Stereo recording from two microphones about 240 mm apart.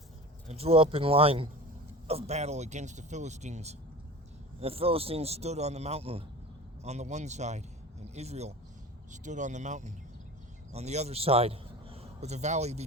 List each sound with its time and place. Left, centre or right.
0.4 s a man's voice: right